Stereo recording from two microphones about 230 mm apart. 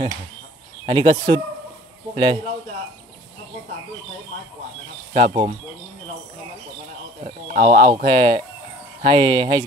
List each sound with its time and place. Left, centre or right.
0.8 s speech: right
5.1 s speech: right
7.2 s a sound: right
7.8 s speech: centre